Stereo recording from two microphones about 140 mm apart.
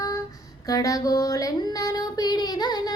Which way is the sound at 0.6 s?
25° left (ahead or behind).